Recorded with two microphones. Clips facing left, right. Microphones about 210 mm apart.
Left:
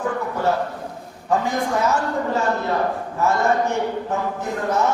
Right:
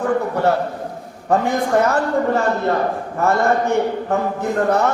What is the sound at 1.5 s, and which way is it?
Speech, 60° right (ahead or behind).